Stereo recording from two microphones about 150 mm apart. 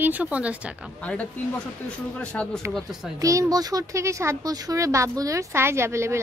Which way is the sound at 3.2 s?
20° right (ahead or behind).